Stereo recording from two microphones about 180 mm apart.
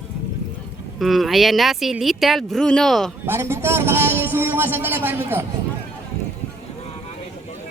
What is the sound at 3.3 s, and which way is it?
A man's voice, 15° right (ahead or behind).